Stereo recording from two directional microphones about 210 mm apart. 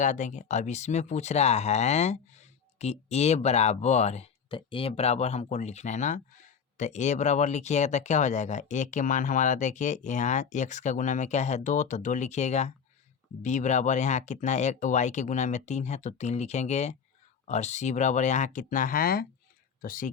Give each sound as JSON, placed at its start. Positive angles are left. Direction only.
{"t": 0.0, "sound": "speech", "side_deg": 35}